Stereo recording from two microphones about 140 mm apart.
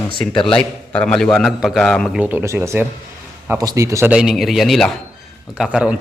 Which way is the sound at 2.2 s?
15° right (ahead or behind).